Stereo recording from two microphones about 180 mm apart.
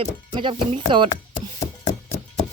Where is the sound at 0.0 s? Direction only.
30° right (ahead or behind).